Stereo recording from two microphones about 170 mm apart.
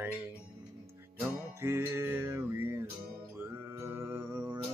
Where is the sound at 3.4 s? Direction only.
15° right (ahead or behind).